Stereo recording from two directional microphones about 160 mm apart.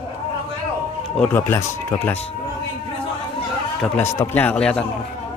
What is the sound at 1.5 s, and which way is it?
Speech, 15° left (ahead or behind).